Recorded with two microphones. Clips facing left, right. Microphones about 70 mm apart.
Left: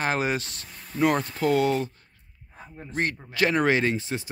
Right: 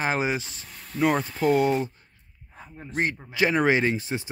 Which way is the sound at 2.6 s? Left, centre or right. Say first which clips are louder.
Right 1 dB; centre.